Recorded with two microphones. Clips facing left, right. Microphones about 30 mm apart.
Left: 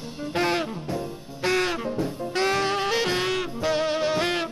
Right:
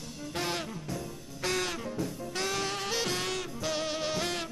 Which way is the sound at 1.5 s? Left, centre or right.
Left.